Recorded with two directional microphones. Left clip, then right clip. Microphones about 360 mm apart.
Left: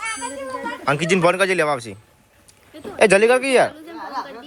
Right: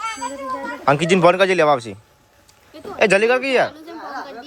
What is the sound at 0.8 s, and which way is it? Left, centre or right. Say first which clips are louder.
Speech: right 3 dB; centre.